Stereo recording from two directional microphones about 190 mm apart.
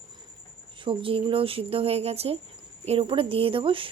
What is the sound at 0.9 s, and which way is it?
A woman's voice, 30° right (ahead or behind).